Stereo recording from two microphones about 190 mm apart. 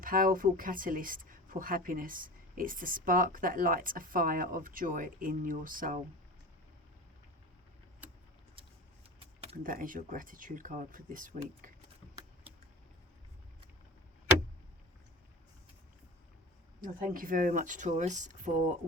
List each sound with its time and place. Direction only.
0.0 s speech: 45° right (ahead or behind)
9.6 s speech: 45° right (ahead or behind)
16.8 s speech: 45° right (ahead or behind)